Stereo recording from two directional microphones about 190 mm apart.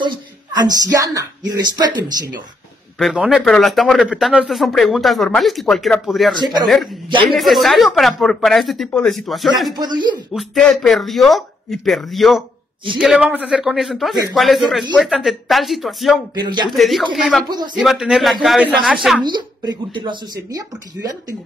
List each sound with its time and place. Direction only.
0.0 s a woman's voice: 20° right (ahead or behind)
3.0 s a man's voice: centre (ahead or behind)
9.8 s a woman's voice: 25° right (ahead or behind)
10.3 s a man's voice: centre (ahead or behind)
16.3 s a woman's voice: 25° right (ahead or behind)
16.7 s a man's voice: centre (ahead or behind)
17.5 s a woman's voice: 20° right (ahead or behind)
17.7 s a man's voice: 5° right (ahead or behind)
19.2 s a woman's voice: 20° right (ahead or behind)